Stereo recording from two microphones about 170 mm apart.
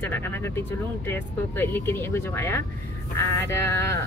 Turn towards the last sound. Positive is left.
turn(degrees=15)  # may be behind; listen again after turning